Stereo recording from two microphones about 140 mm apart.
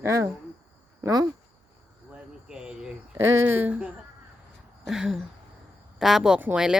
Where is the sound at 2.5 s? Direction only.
5° right (ahead or behind).